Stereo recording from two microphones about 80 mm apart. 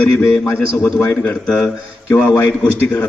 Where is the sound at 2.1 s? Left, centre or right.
Centre.